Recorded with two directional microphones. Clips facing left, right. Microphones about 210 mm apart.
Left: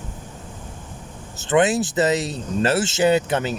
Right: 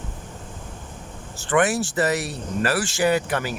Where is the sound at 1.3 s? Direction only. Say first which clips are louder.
Left 3 dB; 20° left (ahead or behind).